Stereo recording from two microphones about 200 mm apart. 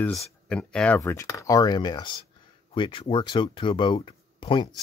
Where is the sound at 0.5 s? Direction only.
5° left (ahead or behind).